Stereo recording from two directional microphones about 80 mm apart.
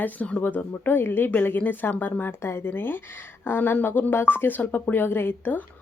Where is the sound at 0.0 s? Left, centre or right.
Centre.